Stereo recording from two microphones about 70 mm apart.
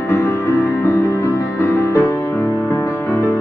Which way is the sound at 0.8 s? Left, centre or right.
Left.